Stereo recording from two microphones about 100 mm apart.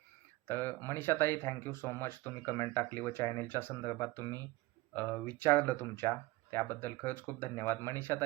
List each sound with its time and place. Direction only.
0.4 s speech: 20° left (ahead or behind)